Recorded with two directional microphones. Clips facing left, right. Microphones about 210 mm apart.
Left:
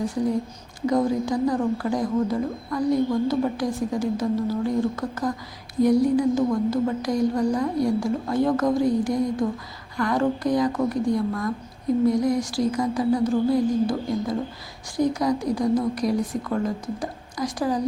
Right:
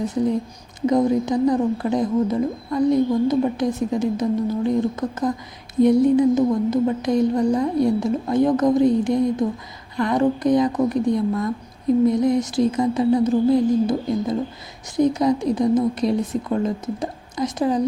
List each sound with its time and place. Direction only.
0.0 s speech: 20° right (ahead or behind)